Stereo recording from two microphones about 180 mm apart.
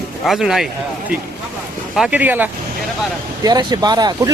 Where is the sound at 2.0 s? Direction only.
10° right (ahead or behind).